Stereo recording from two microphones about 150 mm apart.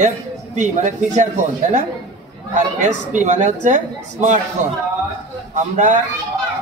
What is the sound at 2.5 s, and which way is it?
A woman's voice, 55° right (ahead or behind).